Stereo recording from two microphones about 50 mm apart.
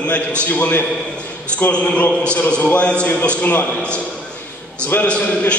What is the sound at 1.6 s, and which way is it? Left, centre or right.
A man's voice, left.